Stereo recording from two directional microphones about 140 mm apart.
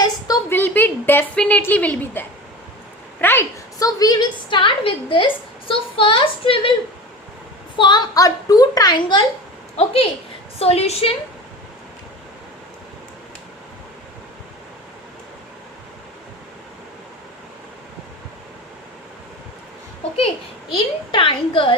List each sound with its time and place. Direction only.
0.5 s a woman's voice: 15° left (ahead or behind); by 6.6 s 40° left (ahead or behind)
7.8 s a child's voice: 30° left (ahead or behind)
9.7 s a woman's voice: 45° left (ahead or behind)
20.7 s a woman's voice: 40° left (ahead or behind)